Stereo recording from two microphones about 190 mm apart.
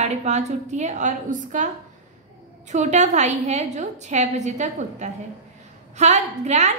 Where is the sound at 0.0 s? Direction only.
35° right (ahead or behind).